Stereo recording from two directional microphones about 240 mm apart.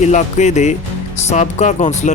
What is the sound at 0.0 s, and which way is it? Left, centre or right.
A man's voice, left.